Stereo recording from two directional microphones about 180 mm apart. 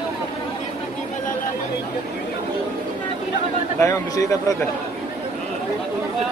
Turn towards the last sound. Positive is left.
turn(degrees=15)  # may be behind; listen again after turning